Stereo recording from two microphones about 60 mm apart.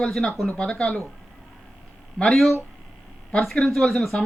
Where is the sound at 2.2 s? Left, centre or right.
Centre.